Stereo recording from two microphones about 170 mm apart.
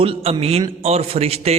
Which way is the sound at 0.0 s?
35° right (ahead or behind).